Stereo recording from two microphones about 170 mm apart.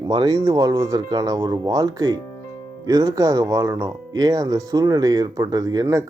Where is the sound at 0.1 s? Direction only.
25° right (ahead or behind).